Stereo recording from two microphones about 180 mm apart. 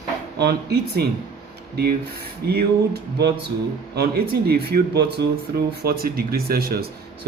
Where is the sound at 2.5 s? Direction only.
60° right (ahead or behind).